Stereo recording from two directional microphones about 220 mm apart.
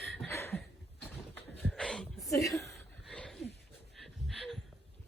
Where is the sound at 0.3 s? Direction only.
10° left (ahead or behind).